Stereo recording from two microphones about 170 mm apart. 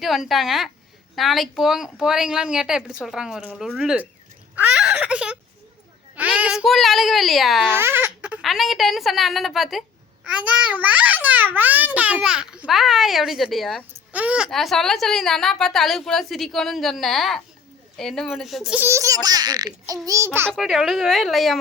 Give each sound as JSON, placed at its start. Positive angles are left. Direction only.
{"t": 0.0, "sound": "a woman's voice", "side_deg": 0}
{"t": 4.5, "sound": "a sound", "side_deg": -5}
{"t": 6.1, "sound": "a woman's voice", "side_deg": -10}
{"t": 7.8, "sound": "a woman's voice", "side_deg": -15}
{"t": 20.5, "sound": "a woman's voice", "side_deg": 0}